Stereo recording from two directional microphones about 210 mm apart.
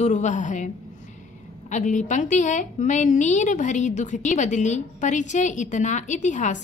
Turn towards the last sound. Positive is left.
turn(degrees=35)  # may be behind; listen again after turning